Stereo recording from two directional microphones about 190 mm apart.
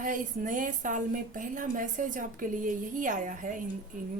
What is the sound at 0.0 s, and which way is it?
A woman's voice, 45° right (ahead or behind).